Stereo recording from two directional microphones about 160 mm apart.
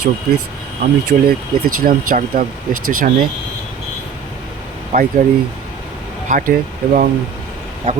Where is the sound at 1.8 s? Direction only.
60° right (ahead or behind).